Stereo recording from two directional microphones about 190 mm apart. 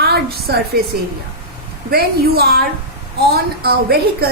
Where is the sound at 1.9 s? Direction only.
55° right (ahead or behind).